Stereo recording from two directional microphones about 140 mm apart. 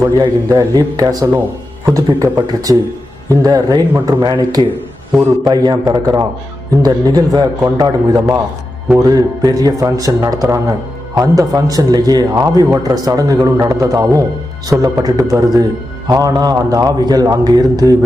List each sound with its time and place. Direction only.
0.2 s a man's voice: 25° right (ahead or behind)